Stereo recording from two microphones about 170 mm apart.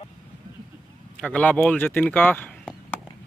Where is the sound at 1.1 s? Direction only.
5° left (ahead or behind).